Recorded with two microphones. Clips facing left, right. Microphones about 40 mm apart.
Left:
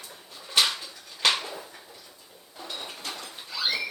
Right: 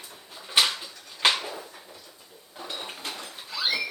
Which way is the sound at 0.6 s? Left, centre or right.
Centre.